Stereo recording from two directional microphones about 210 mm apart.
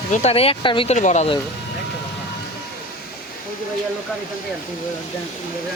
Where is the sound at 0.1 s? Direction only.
30° left (ahead or behind).